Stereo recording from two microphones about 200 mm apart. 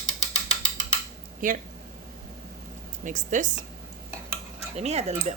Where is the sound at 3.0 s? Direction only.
40° right (ahead or behind).